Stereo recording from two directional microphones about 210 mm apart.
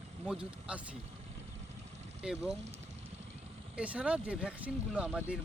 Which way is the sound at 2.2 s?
5° right (ahead or behind).